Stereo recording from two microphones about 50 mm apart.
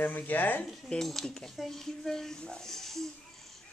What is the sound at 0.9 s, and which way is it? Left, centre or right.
Speech, centre.